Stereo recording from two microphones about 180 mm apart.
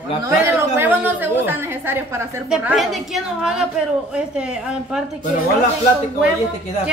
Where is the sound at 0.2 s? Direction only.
15° right (ahead or behind).